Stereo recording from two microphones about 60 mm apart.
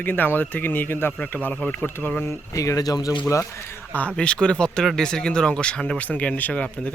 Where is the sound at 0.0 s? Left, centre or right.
Left.